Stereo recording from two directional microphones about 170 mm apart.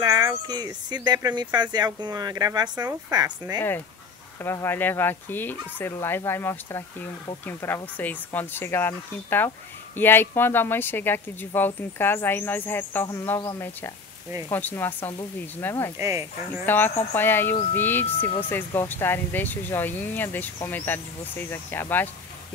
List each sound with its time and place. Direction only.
0.0 s speech: 20° right (ahead or behind)
4.4 s speech: 15° left (ahead or behind)
14.5 s speech: 10° left (ahead or behind)
16.0 s speech: 20° right (ahead or behind)
16.6 s speech: 10° left (ahead or behind)